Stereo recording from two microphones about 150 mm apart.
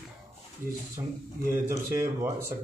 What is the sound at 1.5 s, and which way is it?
Speech, 15° right (ahead or behind).